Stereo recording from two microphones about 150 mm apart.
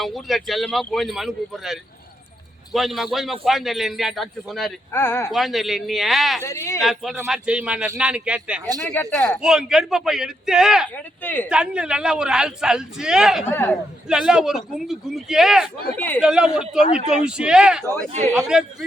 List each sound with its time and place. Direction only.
0.0 s a man's voice: centre (ahead or behind)
4.9 s speech: 15° left (ahead or behind)
5.3 s a man's voice: centre (ahead or behind)
6.4 s speech: 20° left (ahead or behind)
6.7 s a man's voice: centre (ahead or behind)
8.8 s speech: 15° left (ahead or behind)
9.3 s a man's voice: 5° right (ahead or behind)
10.9 s speech: 10° left (ahead or behind)
11.4 s a man's voice: 5° right (ahead or behind)
13.5 s speech: 10° left (ahead or behind)
14.1 s a man's voice: 5° right (ahead or behind)
16.0 s speech: 10° left (ahead or behind)
16.2 s a man's voice: 5° right (ahead or behind)